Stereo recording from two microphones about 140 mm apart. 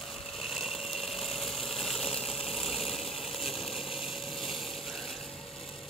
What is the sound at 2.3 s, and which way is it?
Engine, 45° left (ahead or behind).